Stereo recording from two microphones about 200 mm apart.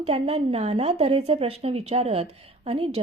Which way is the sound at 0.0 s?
30° right (ahead or behind).